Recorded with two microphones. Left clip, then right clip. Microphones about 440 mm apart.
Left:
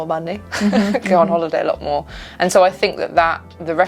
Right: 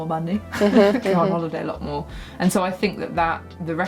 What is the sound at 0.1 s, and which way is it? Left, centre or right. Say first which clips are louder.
Speech: left 5 dB; left.